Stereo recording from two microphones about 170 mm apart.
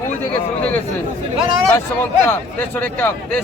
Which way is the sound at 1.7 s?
15° left (ahead or behind).